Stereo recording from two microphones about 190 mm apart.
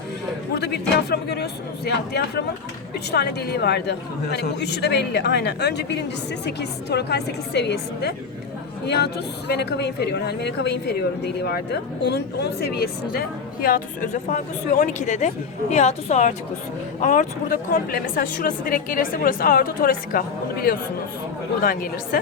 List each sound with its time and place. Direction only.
0.5 s speech: 60° left (ahead or behind)
9.5 s a woman's voice: 60° left (ahead or behind)